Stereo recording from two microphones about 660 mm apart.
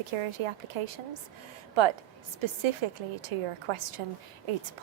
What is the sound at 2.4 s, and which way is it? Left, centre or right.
A woman's voice, right.